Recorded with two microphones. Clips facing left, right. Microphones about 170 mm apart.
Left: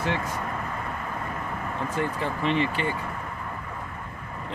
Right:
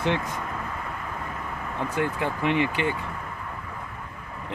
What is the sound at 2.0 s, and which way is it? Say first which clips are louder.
Speech: right 2 dB; 15° right (ahead or behind).